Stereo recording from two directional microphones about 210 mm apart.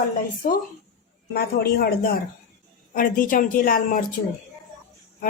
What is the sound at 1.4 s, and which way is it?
A woman's voice, 45° left (ahead or behind).